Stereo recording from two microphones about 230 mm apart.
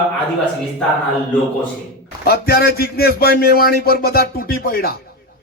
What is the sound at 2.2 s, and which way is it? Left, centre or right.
A man's voice, left.